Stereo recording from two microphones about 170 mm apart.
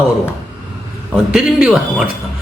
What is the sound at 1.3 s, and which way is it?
Speech, centre (ahead or behind).